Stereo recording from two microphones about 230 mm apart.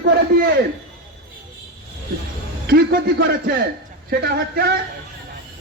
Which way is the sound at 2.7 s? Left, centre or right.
Right.